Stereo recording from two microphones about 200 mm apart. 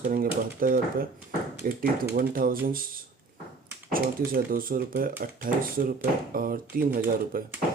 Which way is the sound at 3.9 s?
45° right (ahead or behind).